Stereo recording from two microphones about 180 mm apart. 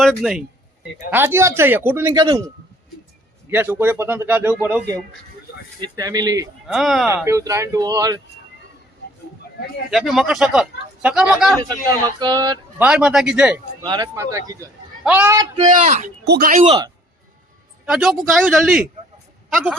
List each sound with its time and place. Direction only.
0.0 s speech: centre (ahead or behind)
1.1 s a man's voice: 15° right (ahead or behind)
2.1 s speech: 25° right (ahead or behind)
3.5 s a man's voice: 10° right (ahead or behind)
6.7 s speech: centre (ahead or behind)
7.3 s speech: 15° right (ahead or behind)
9.9 s speech: centre (ahead or behind)
11.5 s speech: 20° right (ahead or behind)
12.8 s speech: 5° right (ahead or behind)
13.8 s a man's voice: 25° right (ahead or behind)
15.5 s speech: 45° right (ahead or behind)
16.2 s speech: 60° right (ahead or behind)
16.6 s speech: 20° right (ahead or behind)
17.8 s speech: centre (ahead or behind)